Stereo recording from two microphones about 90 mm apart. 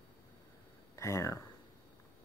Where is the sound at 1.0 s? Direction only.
35° left (ahead or behind).